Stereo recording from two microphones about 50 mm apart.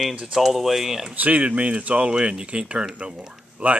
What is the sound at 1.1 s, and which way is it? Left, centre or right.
Speech, right.